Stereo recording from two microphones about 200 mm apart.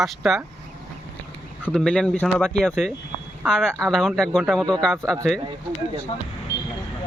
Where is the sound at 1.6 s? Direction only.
5° left (ahead or behind).